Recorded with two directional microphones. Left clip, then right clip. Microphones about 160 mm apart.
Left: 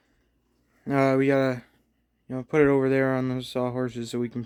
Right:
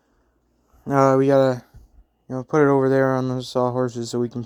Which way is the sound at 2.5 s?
15° left (ahead or behind).